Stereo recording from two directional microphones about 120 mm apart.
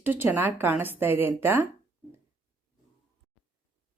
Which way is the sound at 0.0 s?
15° right (ahead or behind).